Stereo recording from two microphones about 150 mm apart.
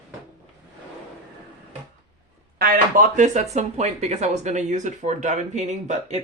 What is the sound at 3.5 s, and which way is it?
Speech, 50° right (ahead or behind).